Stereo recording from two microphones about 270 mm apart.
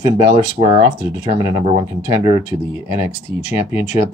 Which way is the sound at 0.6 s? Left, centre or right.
Right.